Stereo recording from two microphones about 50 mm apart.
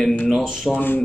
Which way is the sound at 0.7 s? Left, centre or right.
Left.